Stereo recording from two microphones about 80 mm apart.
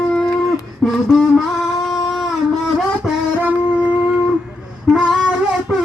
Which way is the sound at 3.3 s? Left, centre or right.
Centre.